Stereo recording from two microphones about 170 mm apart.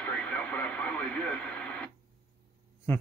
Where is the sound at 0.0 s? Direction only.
5° left (ahead or behind).